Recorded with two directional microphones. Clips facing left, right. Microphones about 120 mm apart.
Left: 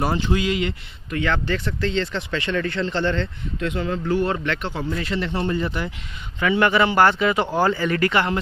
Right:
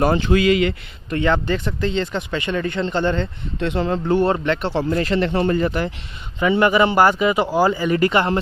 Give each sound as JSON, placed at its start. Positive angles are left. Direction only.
{"t": 0.0, "sound": "speech", "side_deg": -60}
{"t": 1.3, "sound": "speech", "side_deg": -20}
{"t": 3.6, "sound": "speech", "side_deg": -35}
{"t": 4.8, "sound": "speech", "side_deg": -50}
{"t": 6.4, "sound": "speech", "side_deg": -20}